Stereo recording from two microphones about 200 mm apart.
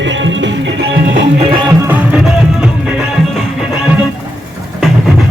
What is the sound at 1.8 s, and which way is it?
Music, 5° right (ahead or behind).